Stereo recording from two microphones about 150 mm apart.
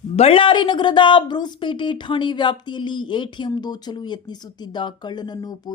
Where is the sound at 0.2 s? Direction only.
40° left (ahead or behind).